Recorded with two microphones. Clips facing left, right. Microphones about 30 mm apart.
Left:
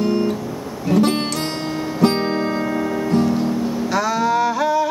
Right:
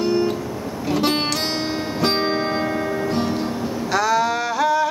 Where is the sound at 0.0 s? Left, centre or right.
Right.